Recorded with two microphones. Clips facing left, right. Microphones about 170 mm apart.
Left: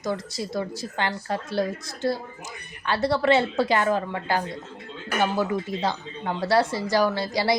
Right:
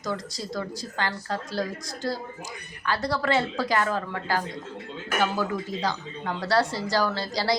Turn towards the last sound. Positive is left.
turn(degrees=20)  # may be behind; listen again after turning